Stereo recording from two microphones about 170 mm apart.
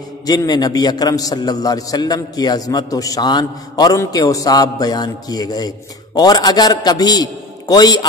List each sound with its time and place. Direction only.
0.3 s a man's voice: 25° left (ahead or behind)